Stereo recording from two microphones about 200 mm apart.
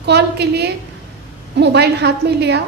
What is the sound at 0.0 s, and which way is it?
A woman's voice, 55° right (ahead or behind).